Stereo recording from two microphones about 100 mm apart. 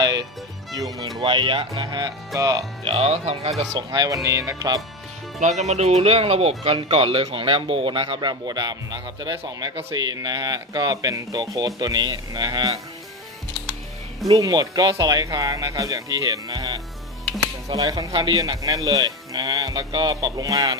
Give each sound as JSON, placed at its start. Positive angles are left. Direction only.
{"t": 0.0, "sound": "music", "side_deg": -45}
{"t": 0.8, "sound": "speech", "side_deg": -35}
{"t": 1.2, "sound": "speech", "side_deg": -60}
{"t": 1.9, "sound": "a man's voice", "side_deg": -45}
{"t": 2.8, "sound": "speech", "side_deg": -80}
{"t": 3.8, "sound": "speech", "side_deg": -40}
{"t": 5.7, "sound": "speech", "side_deg": -90}
{"t": 6.9, "sound": "speech", "side_deg": -70}
{"t": 14.3, "sound": "speech", "side_deg": -40}
{"t": 18.1, "sound": "a man's voice", "side_deg": -50}
{"t": 18.3, "sound": "speech", "side_deg": -35}